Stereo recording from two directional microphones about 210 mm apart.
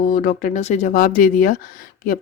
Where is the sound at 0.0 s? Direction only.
40° left (ahead or behind).